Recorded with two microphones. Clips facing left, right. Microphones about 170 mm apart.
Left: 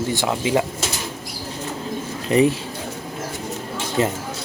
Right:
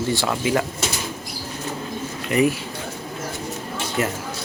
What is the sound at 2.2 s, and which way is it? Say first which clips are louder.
Speech: left 3 dB; 30° left (ahead or behind).